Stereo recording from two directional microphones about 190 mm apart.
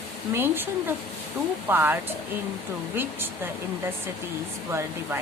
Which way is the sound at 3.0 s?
10° right (ahead or behind).